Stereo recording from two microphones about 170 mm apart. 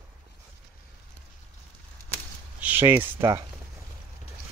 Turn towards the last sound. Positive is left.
turn(degrees=-20)  # may be behind; listen again after turning